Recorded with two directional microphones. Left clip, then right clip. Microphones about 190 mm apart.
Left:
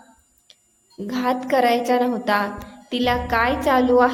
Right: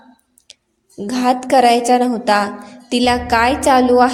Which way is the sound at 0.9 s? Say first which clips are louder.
Right 6 dB; 25° right (ahead or behind).